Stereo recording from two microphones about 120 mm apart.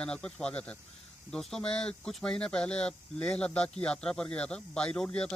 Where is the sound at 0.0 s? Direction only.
5° left (ahead or behind).